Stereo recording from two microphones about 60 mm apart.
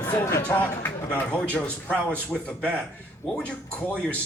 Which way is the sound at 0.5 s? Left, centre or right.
Left.